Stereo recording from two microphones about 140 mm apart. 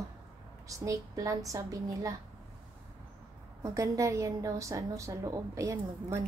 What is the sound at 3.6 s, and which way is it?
A woman's voice, 25° right (ahead or behind).